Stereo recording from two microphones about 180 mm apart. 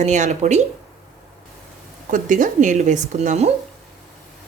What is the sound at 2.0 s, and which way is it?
Speech, 45° right (ahead or behind).